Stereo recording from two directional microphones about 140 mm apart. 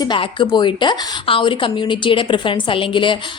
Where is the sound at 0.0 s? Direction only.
35° left (ahead or behind).